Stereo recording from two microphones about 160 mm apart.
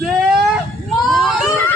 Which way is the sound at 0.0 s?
5° right (ahead or behind).